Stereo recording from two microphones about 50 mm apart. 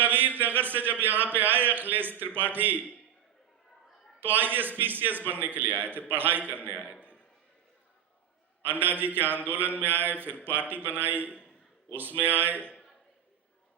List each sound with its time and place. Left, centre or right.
0.0 s a man's voice: right
4.2 s a man's voice: right
8.6 s a man's voice: right
9.8 s mantra: right
10.4 s a man's voice: right
12.5 s a man's voice: left